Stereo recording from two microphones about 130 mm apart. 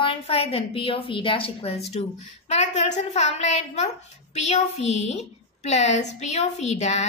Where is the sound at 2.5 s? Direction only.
65° left (ahead or behind).